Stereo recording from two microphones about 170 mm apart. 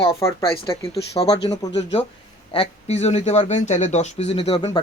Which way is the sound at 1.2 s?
30° left (ahead or behind).